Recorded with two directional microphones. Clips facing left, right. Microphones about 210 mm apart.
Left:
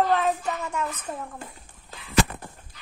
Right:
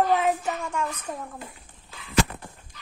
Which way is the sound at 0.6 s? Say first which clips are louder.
Even; centre (ahead or behind).